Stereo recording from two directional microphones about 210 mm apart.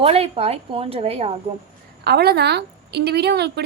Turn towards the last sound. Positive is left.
turn(degrees=-50)  # may be behind; listen again after turning